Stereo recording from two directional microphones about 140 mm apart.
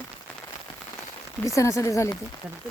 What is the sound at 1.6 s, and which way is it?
Speech, 20° left (ahead or behind).